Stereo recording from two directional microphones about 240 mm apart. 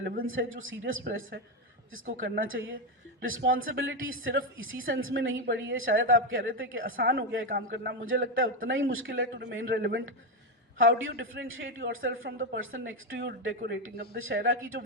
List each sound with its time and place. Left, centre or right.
0.0 s speech: right
0.3 s speech: right
2.0 s a man's voice: right
6.8 s a man's voice: right
9.0 s a man's voice: right
14.2 s a man's voice: right